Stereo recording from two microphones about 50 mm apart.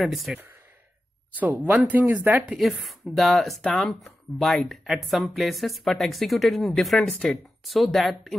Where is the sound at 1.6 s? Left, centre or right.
Right.